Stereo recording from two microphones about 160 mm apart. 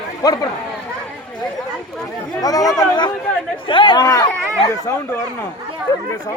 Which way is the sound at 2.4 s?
20° left (ahead or behind).